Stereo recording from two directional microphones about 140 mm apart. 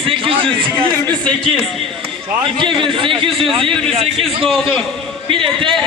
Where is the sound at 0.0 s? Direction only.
40° right (ahead or behind).